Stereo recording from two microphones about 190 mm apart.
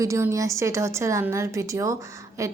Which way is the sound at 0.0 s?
15° right (ahead or behind).